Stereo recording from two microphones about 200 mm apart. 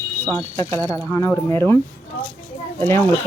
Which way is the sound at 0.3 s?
10° left (ahead or behind).